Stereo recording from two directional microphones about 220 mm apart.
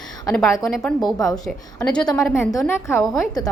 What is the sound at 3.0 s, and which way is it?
Speech, centre (ahead or behind).